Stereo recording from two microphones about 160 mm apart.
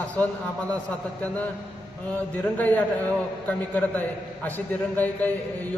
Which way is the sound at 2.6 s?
10° left (ahead or behind).